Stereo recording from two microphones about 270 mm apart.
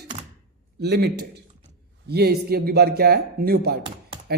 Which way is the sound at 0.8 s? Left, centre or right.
Right.